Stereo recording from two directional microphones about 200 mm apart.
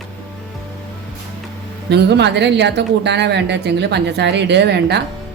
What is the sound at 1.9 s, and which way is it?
A woman's voice, 60° right (ahead or behind).